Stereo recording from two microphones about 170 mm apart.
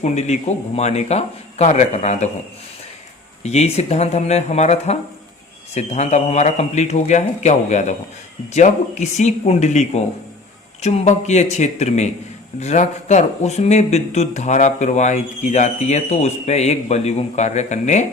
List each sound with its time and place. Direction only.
0.0 s speech: 40° left (ahead or behind)
3.4 s speech: 40° left (ahead or behind)